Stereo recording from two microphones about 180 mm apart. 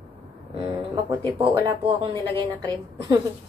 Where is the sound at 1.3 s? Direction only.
30° right (ahead or behind).